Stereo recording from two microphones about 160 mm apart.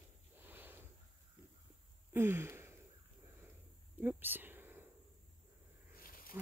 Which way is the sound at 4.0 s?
10° right (ahead or behind).